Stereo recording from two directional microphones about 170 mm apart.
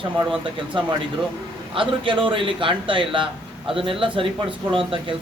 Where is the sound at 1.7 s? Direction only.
30° right (ahead or behind).